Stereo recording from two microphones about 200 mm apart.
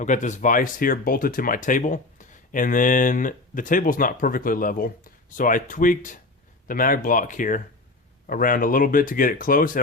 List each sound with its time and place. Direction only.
0.0 s speech: 40° left (ahead or behind)